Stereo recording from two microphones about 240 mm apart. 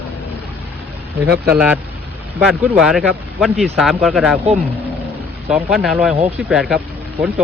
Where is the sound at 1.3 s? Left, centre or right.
Centre.